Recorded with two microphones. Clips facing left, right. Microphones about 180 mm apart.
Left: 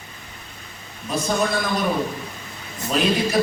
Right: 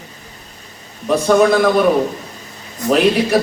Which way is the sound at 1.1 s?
65° right (ahead or behind).